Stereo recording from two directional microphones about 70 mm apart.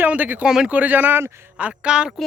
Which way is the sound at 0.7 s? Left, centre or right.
Right.